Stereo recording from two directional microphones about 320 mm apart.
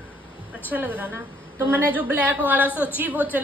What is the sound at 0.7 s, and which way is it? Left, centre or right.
A woman's voice, centre.